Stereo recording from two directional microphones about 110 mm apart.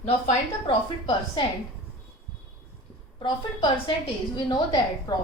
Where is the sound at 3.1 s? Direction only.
45° left (ahead or behind).